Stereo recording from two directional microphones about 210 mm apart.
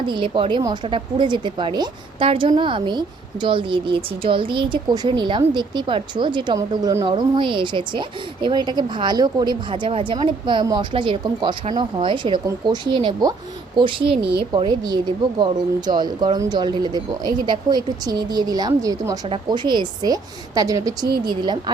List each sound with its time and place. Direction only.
0.1 s a woman's voice: 25° right (ahead or behind)